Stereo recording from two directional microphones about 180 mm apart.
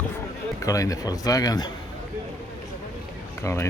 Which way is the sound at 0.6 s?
20° left (ahead or behind).